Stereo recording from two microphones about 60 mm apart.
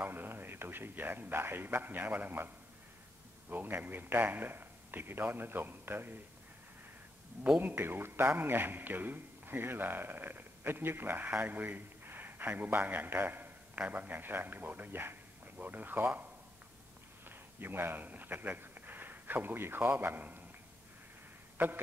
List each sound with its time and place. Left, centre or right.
0.0 s a man's voice: right
7.6 s a man's voice: right
21.6 s a man's voice: right